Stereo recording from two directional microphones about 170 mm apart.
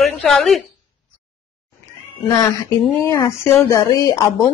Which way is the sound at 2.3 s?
20° left (ahead or behind).